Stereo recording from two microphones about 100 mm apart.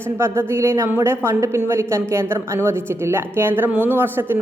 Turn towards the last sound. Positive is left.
turn(degrees=-20)  # may be behind; listen again after turning